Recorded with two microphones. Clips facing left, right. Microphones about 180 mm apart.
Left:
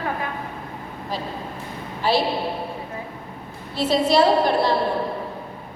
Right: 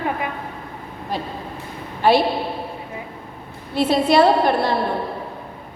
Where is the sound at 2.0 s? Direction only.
60° right (ahead or behind).